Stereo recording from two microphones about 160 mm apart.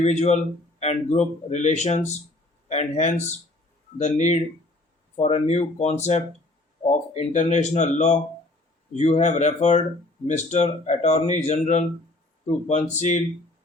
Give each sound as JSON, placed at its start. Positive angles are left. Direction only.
{"t": 0.0, "sound": "speech", "side_deg": 45}